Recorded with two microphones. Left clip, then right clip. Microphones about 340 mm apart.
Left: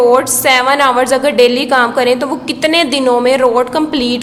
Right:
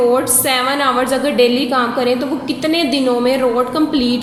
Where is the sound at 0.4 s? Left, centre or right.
Centre.